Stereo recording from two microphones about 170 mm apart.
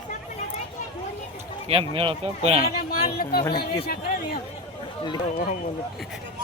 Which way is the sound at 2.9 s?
60° left (ahead or behind).